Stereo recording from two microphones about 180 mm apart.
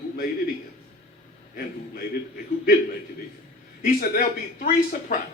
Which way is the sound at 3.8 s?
55° left (ahead or behind).